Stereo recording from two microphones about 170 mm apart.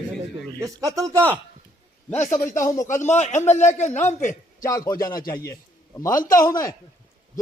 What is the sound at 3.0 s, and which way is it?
A man's voice, 45° left (ahead or behind).